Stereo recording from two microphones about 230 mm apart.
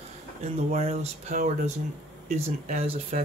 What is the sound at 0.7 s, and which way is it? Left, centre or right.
Speech, right.